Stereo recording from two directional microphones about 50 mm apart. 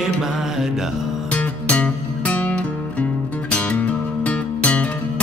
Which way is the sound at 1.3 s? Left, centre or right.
Left.